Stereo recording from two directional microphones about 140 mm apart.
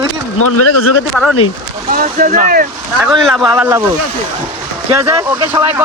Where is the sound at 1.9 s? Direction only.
75° right (ahead or behind).